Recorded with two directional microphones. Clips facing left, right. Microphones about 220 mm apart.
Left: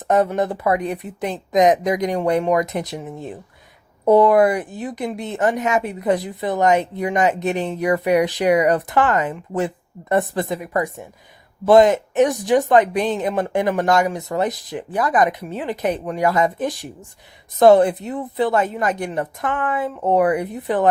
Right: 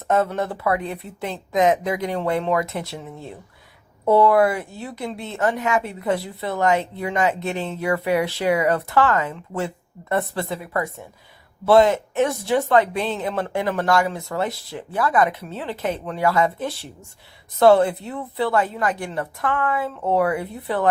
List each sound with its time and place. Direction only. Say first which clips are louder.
0.1 s a woman's voice: left 3 dB; 15° left (ahead or behind)